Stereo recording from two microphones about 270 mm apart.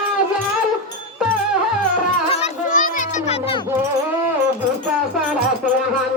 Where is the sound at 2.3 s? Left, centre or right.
Left.